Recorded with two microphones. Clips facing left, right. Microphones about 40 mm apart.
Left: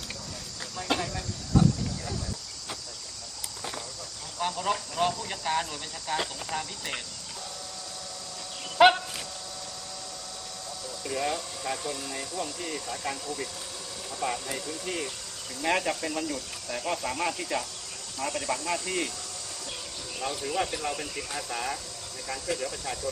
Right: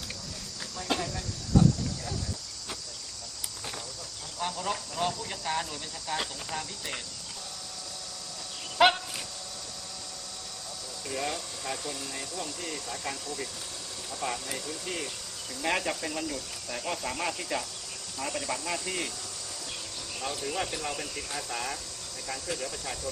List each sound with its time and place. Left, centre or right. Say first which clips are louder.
0.8 s speech: left 2 dB; centre
4.4 s speech: left 3 dB; centre
8.8 s a sound: left 4 dB; centre
11.0 s speech: left 3 dB; centre
20.1 s speech: left 3 dB; centre